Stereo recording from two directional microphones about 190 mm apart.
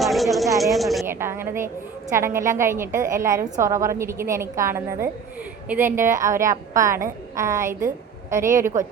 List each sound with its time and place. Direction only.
0.0 s a sound: centre (ahead or behind)
0.6 s a woman's voice: centre (ahead or behind)
1.0 s a woman's voice: 10° right (ahead or behind)